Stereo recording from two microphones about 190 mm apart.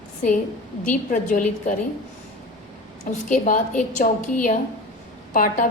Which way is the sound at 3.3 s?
40° left (ahead or behind).